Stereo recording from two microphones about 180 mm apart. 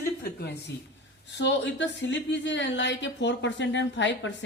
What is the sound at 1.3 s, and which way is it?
Speech, 85° left.